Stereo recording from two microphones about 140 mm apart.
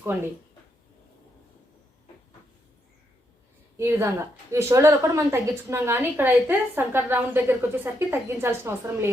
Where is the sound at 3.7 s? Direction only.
20° right (ahead or behind).